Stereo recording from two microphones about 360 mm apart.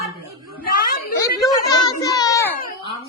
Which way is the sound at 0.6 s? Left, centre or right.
Left.